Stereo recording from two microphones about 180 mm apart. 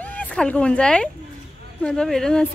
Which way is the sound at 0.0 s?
10° left (ahead or behind).